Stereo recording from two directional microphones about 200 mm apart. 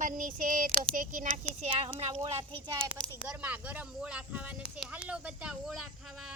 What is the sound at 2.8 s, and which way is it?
Speech, 5° left (ahead or behind).